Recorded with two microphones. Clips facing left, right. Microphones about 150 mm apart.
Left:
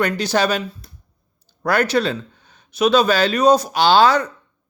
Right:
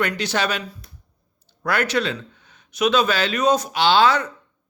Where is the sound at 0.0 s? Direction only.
35° left (ahead or behind).